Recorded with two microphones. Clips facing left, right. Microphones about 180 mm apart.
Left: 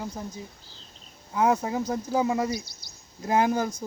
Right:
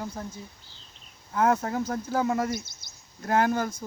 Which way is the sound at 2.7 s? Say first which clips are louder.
Left 3 dB; 20° right (ahead or behind).